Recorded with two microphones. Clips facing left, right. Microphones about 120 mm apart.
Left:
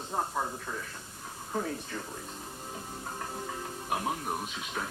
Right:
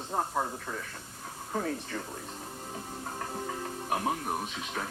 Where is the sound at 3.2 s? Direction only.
45° right (ahead or behind).